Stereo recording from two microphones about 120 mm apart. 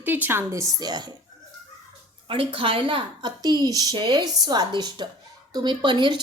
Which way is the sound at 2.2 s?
45° right (ahead or behind).